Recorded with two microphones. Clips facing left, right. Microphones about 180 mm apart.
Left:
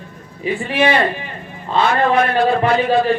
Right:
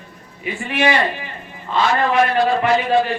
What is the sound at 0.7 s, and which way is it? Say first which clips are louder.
Speech: left 2 dB; 30° left (ahead or behind).